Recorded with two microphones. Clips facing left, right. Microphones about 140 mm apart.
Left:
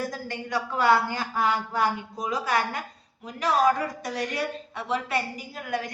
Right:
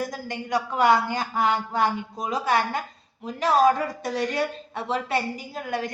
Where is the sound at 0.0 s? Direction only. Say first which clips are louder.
Right 1 dB; 15° right (ahead or behind).